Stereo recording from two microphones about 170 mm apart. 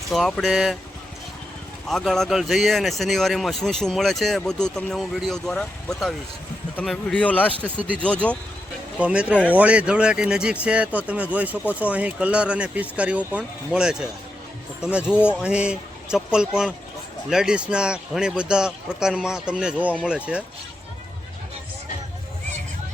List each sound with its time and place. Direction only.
0.1 s speech: centre (ahead or behind)
1.9 s speech: centre (ahead or behind)
7.6 s speech: 10° right (ahead or behind)
8.0 s speech: 5° left (ahead or behind)
9.0 s speech: 5° right (ahead or behind)
15.1 s speech: 10° left (ahead or behind)
15.4 s speech: 5° right (ahead or behind)